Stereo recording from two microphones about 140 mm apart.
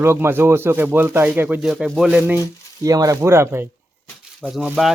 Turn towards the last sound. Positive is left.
turn(degrees=0)  # may be behind; listen again after turning